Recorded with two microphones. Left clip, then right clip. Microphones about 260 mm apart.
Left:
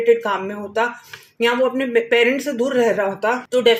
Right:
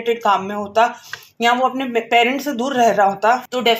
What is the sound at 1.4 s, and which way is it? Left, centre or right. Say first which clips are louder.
Speech: right 1 dB; right.